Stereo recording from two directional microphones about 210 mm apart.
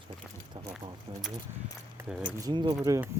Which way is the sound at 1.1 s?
20° right (ahead or behind).